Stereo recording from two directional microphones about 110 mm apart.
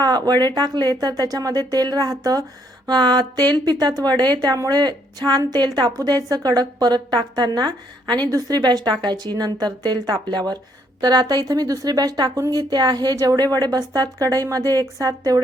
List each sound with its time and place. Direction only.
0.0 s a woman's voice: 35° right (ahead or behind)